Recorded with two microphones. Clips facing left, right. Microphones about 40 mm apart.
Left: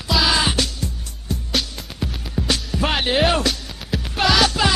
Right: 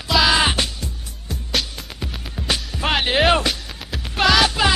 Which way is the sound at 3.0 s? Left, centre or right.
Centre.